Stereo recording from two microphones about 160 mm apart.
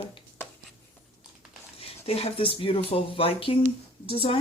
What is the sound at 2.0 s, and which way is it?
Speech, 40° left (ahead or behind).